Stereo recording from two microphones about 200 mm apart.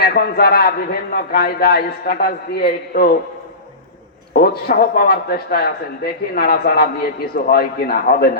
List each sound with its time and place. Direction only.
0.0 s a man's voice: 50° left (ahead or behind)
4.4 s a man's voice: 50° left (ahead or behind)